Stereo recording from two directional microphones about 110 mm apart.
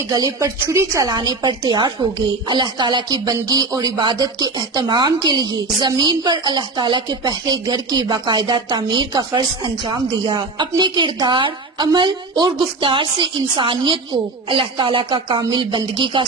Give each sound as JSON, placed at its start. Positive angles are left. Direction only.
{"t": 0.1, "sound": "a woman's voice", "side_deg": -35}